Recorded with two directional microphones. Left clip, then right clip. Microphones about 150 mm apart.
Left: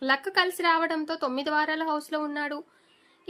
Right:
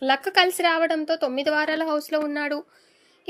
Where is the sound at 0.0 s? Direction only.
10° right (ahead or behind).